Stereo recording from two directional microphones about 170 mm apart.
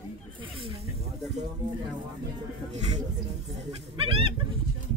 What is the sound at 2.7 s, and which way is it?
Speech, 45° right (ahead or behind).